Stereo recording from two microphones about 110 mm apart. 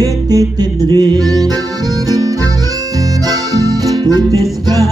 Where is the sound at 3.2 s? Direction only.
35° right (ahead or behind).